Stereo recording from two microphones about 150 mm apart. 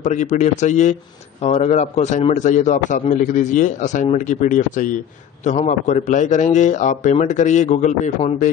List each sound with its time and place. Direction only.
0.0 s a man's voice: 50° left (ahead or behind)